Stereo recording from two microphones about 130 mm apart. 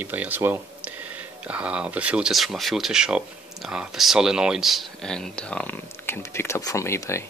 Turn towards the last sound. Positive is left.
turn(degrees=20)  # may be behind; listen again after turning